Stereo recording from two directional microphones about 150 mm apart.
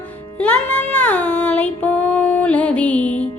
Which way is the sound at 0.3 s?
10° left (ahead or behind).